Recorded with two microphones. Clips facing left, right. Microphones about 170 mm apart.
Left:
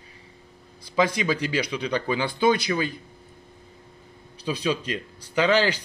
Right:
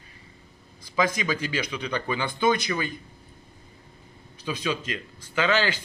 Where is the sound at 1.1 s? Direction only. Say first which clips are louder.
Left 3 dB; 30° left (ahead or behind).